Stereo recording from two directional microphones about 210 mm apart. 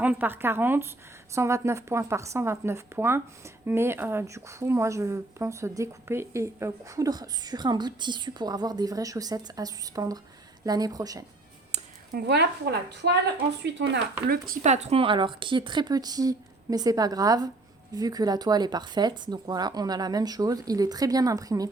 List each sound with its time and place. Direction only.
0.0 s speech: 10° right (ahead or behind)
12.1 s speech: 50° right (ahead or behind)
14.5 s speech: 35° right (ahead or behind); by 21.7 s 15° right (ahead or behind)